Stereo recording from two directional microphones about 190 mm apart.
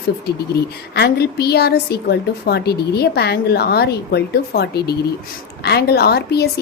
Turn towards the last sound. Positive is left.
turn(degrees=60)  # may be behind; listen again after turning